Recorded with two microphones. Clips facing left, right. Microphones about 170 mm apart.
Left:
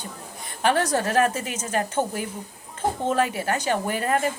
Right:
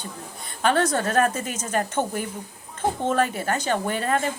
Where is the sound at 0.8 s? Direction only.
10° left (ahead or behind).